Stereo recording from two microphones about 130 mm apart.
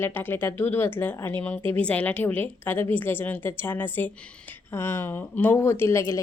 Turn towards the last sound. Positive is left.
turn(degrees=25)  # may be behind; listen again after turning